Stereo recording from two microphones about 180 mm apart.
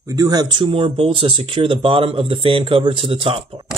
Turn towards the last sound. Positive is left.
turn(degrees=-30)  # may be behind; listen again after turning